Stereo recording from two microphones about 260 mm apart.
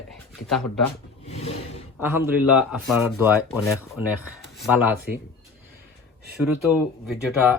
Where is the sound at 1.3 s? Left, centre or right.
Left.